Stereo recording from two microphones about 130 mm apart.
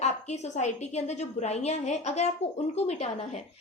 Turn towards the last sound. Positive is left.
turn(degrees=55)  # may be behind; listen again after turning